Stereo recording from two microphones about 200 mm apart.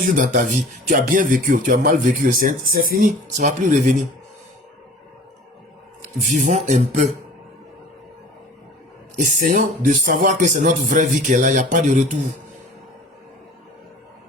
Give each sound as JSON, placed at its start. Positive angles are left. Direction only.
{"t": 0.0, "sound": "speech", "side_deg": -40}
{"t": 6.1, "sound": "speech", "side_deg": -40}
{"t": 9.2, "sound": "speech", "side_deg": -40}